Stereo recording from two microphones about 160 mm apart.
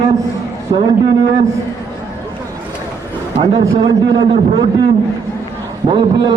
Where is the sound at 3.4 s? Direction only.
40° right (ahead or behind).